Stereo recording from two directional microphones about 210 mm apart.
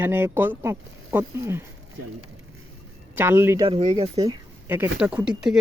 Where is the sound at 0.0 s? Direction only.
10° right (ahead or behind).